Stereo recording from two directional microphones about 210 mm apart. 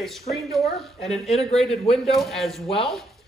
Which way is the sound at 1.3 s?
30° left (ahead or behind).